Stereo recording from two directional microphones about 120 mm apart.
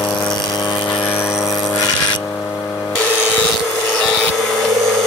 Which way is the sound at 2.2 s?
15° left (ahead or behind).